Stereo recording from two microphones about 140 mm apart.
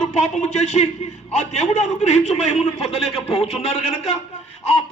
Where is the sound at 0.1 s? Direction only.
55° left (ahead or behind).